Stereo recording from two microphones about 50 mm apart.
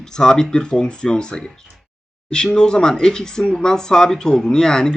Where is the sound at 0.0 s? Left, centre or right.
Centre.